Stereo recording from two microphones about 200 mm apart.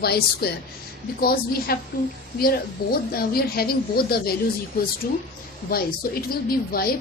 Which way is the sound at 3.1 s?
50° left (ahead or behind).